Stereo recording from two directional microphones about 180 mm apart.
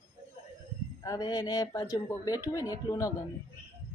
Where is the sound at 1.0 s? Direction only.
20° left (ahead or behind).